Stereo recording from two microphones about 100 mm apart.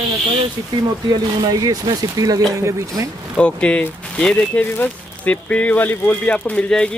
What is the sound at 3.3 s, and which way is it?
Speech, 10° left (ahead or behind).